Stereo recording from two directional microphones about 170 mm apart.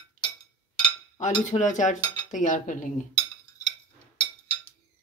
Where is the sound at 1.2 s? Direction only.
45° left (ahead or behind).